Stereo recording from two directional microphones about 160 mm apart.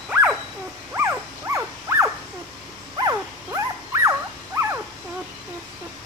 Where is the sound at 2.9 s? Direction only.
20° right (ahead or behind).